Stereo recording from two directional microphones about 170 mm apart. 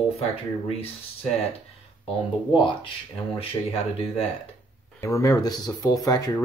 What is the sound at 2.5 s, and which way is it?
Speech, 30° left (ahead or behind).